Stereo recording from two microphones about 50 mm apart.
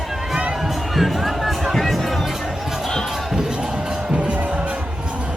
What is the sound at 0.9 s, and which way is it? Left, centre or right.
Music, centre.